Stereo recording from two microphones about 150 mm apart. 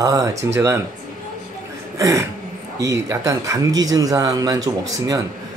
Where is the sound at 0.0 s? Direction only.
25° right (ahead or behind).